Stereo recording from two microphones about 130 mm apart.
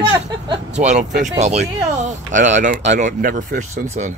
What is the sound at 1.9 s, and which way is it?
Speech, 70° right (ahead or behind).